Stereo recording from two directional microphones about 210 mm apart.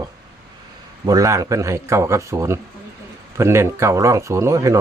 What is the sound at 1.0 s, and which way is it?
Speech, 15° right (ahead or behind).